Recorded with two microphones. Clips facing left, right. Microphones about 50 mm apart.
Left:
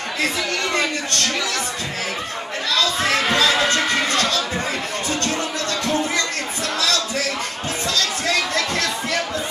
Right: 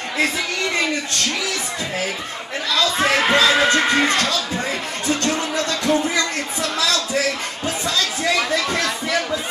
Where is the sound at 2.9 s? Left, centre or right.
Right.